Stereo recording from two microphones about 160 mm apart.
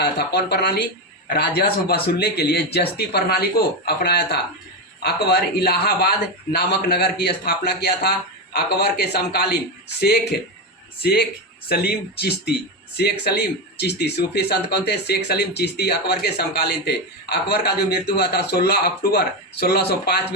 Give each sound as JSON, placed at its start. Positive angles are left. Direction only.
{"t": 0.0, "sound": "speech", "side_deg": 90}
{"t": 11.0, "sound": "speech", "side_deg": 80}